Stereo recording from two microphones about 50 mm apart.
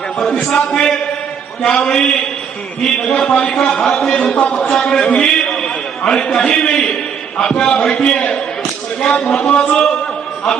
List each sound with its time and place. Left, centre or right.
0.5 s a man's voice: centre